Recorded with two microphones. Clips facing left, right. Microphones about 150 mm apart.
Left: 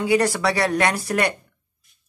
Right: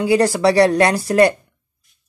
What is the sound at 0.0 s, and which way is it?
Speech, 30° right (ahead or behind).